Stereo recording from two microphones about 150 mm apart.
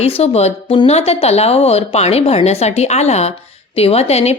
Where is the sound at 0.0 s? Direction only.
45° left (ahead or behind).